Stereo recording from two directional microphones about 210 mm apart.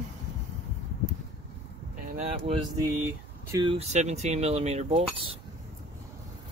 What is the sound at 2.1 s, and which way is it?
Speech, 30° right (ahead or behind).